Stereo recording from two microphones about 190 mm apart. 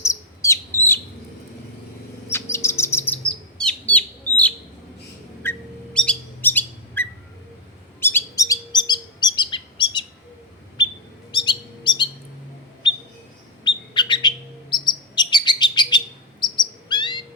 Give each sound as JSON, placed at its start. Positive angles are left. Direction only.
{"t": 0.0, "sound": "bird", "side_deg": 15}
{"t": 2.3, "sound": "bird", "side_deg": 15}
{"t": 8.0, "sound": "chirp", "side_deg": 15}
{"t": 10.8, "sound": "a sound", "side_deg": 25}
{"t": 11.3, "sound": "bird", "side_deg": 25}
{"t": 16.9, "sound": "cricket", "side_deg": 25}